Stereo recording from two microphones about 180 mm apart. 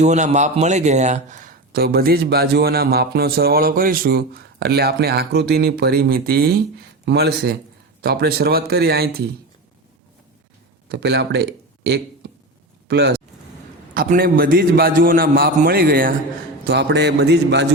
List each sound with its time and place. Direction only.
0.0 s speech: 40° right (ahead or behind); by 9.3 s 60° right (ahead or behind)
10.8 s a man's voice: 70° right (ahead or behind)
13.9 s a man's voice: 55° right (ahead or behind)
16.6 s a man's voice: 70° right (ahead or behind)